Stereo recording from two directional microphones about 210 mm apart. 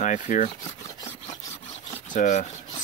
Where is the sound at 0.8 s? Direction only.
15° left (ahead or behind).